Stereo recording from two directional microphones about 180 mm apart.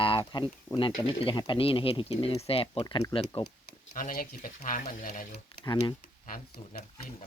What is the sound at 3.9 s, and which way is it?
Speech, 50° left (ahead or behind).